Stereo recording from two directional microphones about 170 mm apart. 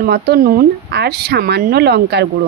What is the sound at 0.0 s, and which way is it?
Speech, 65° right (ahead or behind).